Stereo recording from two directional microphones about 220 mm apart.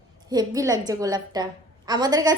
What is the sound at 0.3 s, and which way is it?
A woman's voice, 15° right (ahead or behind).